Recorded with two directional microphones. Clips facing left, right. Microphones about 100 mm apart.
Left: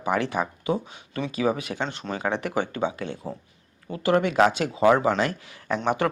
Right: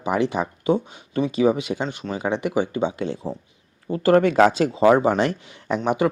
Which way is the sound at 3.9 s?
40° right (ahead or behind).